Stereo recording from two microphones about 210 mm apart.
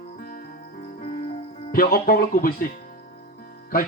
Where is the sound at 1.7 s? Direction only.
45° left (ahead or behind).